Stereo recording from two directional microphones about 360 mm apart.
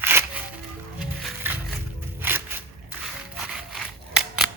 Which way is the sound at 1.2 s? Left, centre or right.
Centre.